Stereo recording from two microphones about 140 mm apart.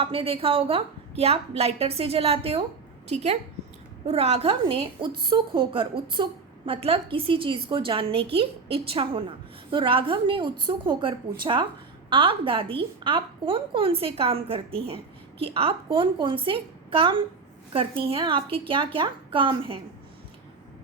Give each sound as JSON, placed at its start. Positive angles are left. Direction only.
{"t": 0.0, "sound": "a woman's voice", "side_deg": -40}